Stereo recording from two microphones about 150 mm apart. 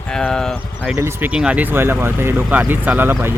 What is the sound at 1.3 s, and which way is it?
Speech, 5° right (ahead or behind).